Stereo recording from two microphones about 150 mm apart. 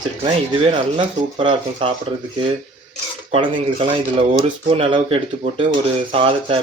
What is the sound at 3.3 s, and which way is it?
Speech, 40° right (ahead or behind).